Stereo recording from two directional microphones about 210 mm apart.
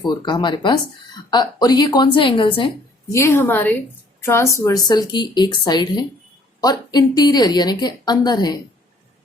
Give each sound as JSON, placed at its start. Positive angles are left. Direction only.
{"t": 0.0, "sound": "a woman's voice", "side_deg": 20}
{"t": 3.1, "sound": "a woman's voice", "side_deg": 15}